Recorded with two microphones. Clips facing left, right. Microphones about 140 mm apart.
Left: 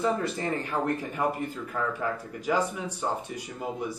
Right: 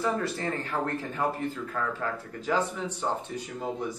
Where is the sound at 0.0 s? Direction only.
15° left (ahead or behind).